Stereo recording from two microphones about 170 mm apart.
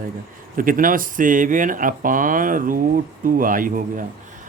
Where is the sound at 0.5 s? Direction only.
55° right (ahead or behind).